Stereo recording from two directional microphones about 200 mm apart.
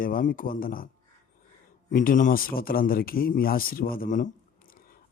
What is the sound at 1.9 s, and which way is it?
A man's voice, 40° left (ahead or behind).